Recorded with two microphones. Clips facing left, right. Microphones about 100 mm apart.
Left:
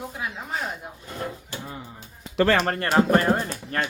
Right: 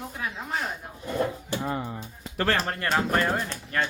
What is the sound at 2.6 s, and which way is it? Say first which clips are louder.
Speech: left 4 dB; 45° left (ahead or behind).